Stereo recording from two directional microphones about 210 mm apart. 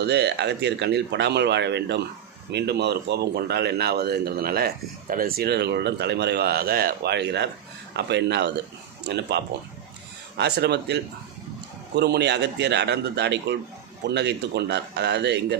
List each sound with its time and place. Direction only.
0.0 s a man's voice: 50° right (ahead or behind)